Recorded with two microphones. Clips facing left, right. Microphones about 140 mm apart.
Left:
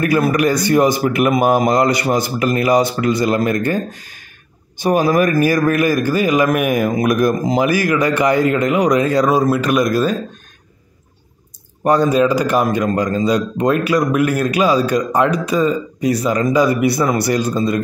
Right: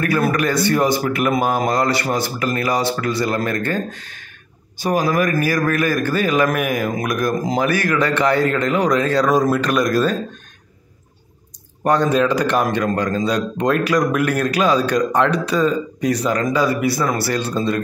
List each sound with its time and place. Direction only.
0.0 s speech: 15° left (ahead or behind)
4.7 s a man's voice: 25° left (ahead or behind)
6.7 s a man's voice: 25° left (ahead or behind)
7.4 s speech: 10° left (ahead or behind)
11.8 s speech: 10° left (ahead or behind)